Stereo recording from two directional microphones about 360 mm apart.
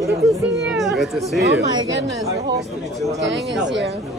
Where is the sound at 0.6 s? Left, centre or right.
Centre.